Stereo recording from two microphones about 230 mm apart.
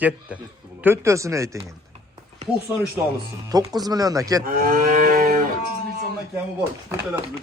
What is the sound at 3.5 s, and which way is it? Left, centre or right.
Speech, centre.